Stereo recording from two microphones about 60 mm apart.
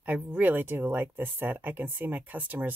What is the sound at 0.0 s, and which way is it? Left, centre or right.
Speech, right.